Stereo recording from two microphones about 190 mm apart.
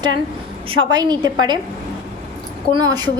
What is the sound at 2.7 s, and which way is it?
Speech, 20° right (ahead or behind).